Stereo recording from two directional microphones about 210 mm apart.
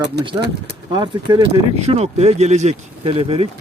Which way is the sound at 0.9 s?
20° right (ahead or behind).